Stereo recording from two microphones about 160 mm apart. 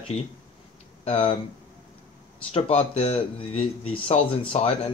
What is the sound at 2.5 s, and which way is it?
Speech, 40° left (ahead or behind).